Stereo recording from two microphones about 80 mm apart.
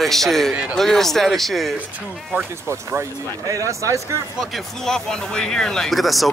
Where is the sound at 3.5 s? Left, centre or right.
Right.